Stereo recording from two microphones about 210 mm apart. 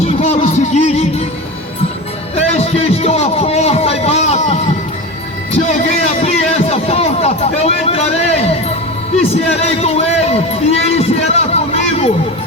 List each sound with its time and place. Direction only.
0.2 s music: 30° left (ahead or behind)
2.3 s music: 30° left (ahead or behind)
5.5 s a sound: 30° left (ahead or behind)